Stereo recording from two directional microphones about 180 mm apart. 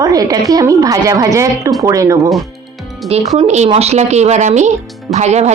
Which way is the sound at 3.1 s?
35° right (ahead or behind).